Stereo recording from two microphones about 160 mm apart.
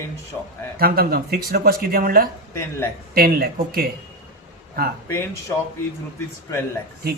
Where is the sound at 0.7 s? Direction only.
70° right (ahead or behind).